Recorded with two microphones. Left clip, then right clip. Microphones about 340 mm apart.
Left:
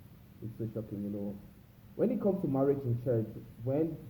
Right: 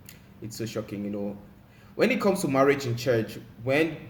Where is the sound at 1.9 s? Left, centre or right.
Right.